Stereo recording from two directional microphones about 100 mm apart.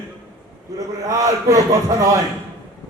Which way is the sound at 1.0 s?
30° right (ahead or behind).